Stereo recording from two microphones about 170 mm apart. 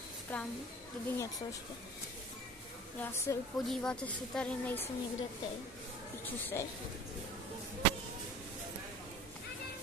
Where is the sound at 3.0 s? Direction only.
15° left (ahead or behind).